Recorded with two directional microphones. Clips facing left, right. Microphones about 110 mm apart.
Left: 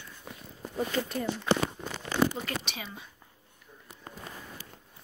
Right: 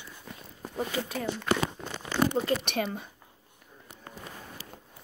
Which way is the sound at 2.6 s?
55° right (ahead or behind).